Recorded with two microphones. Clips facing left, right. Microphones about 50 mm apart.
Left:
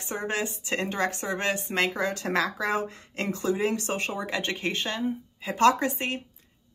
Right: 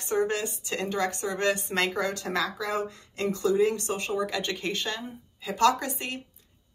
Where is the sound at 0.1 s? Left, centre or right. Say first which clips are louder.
Right 3 dB; left.